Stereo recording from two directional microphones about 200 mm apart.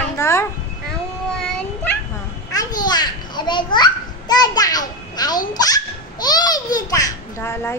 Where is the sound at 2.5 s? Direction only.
20° left (ahead or behind).